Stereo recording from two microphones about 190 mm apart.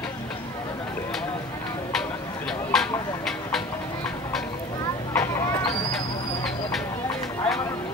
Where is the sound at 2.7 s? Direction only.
Centre (ahead or behind).